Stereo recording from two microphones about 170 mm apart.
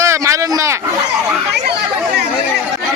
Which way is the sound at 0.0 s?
15° right (ahead or behind).